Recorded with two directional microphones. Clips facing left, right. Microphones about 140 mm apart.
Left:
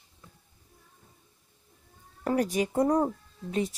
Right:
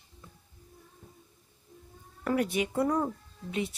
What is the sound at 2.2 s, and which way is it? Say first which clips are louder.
Speech: left 2 dB; 35° left (ahead or behind).